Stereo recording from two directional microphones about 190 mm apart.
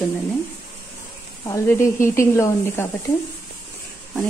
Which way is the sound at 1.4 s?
15° left (ahead or behind).